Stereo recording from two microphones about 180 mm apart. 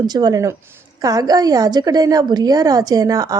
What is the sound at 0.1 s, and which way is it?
A woman's voice, 20° right (ahead or behind).